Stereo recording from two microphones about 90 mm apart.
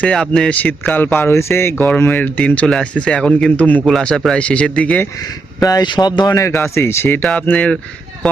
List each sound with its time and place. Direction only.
0.0 s speech: 10° left (ahead or behind)
0.6 s speech: 20° left (ahead or behind)
5.5 s speech: 45° left (ahead or behind)
6.4 s speech: 30° left (ahead or behind)
7.2 s speech: 10° left (ahead or behind)